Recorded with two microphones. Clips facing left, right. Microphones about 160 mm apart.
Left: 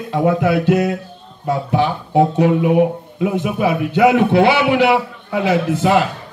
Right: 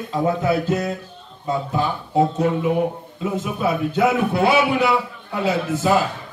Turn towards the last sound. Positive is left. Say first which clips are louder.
# left 4 dB
turn(degrees=75)  # may be behind; listen again after turning